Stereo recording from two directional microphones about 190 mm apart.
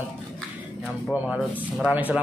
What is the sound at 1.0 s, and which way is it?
A man's voice, 5° right (ahead or behind).